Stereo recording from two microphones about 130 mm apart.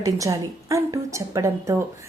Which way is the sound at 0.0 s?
25° right (ahead or behind).